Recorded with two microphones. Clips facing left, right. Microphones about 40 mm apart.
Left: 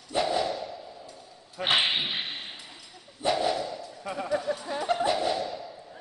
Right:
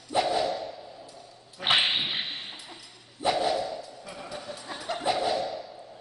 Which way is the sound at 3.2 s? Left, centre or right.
Centre.